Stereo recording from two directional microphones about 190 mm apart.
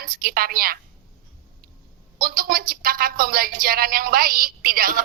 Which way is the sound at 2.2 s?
50° right (ahead or behind).